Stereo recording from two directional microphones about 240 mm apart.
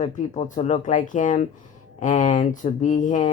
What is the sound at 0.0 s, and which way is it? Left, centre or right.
Speech, left.